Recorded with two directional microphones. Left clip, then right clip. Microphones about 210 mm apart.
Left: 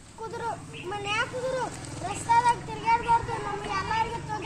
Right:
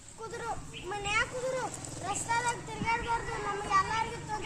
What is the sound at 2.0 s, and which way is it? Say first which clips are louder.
Child singing: left 9 dB; 15° right (ahead or behind).